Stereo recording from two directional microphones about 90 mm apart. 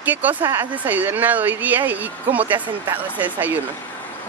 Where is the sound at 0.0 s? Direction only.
20° right (ahead or behind).